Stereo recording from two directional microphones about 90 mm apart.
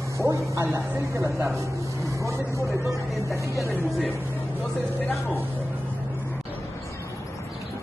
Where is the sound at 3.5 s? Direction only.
30° right (ahead or behind).